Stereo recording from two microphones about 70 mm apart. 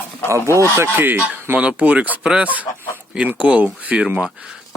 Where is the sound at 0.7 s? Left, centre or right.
Right.